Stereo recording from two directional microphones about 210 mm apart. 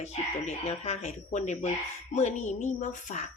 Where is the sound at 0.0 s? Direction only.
30° left (ahead or behind).